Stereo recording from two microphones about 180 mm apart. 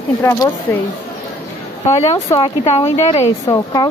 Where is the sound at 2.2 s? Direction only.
30° left (ahead or behind).